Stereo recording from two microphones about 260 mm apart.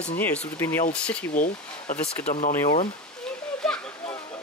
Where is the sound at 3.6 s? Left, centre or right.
Centre.